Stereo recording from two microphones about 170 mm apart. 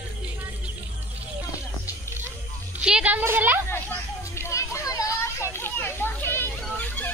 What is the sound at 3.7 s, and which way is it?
Children playing, 15° left (ahead or behind).